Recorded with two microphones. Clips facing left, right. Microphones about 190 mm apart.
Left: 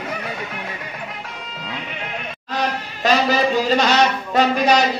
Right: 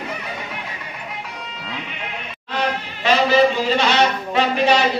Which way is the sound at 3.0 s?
40° left (ahead or behind).